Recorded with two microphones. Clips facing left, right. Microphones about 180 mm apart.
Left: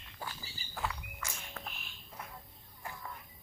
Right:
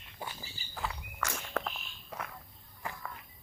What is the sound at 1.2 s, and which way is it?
Walk, 80° right.